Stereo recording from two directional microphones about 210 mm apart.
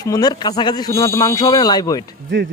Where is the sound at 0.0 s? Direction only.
20° left (ahead or behind).